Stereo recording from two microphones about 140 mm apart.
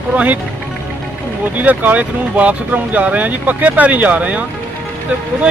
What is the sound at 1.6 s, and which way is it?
Speech, 10° right (ahead or behind).